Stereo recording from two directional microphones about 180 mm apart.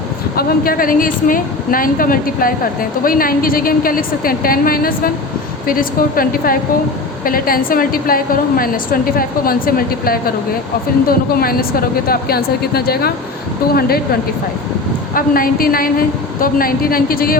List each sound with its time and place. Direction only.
0.3 s a woman's voice: 55° left (ahead or behind)
15.1 s a woman's voice: 50° left (ahead or behind)